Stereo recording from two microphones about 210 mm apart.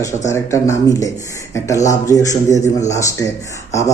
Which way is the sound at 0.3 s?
15° left (ahead or behind).